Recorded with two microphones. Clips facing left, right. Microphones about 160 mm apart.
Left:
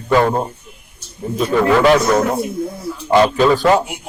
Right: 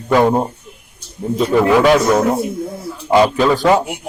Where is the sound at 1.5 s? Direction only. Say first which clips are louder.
Right 1 dB; 10° right (ahead or behind).